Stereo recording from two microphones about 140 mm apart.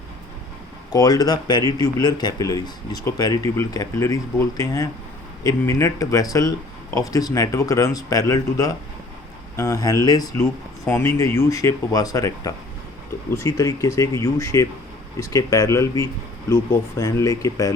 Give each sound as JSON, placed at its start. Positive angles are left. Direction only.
{"t": 0.9, "sound": "speech", "side_deg": 25}